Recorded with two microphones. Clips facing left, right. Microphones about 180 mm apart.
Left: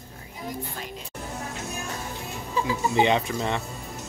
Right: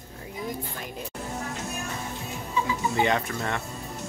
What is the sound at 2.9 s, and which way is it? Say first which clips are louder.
Speech: left 4 dB; 20° left (ahead or behind).